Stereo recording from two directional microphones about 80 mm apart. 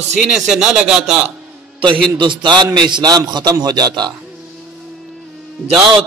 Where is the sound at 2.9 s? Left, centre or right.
Right.